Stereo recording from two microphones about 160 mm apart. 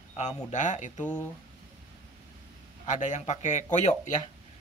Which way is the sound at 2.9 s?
50° left (ahead or behind).